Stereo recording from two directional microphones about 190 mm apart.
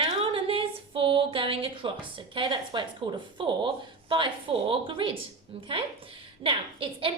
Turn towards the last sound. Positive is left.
turn(degrees=-30)  # may be behind; listen again after turning